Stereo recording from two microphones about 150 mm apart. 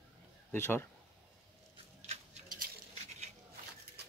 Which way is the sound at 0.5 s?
15° left (ahead or behind).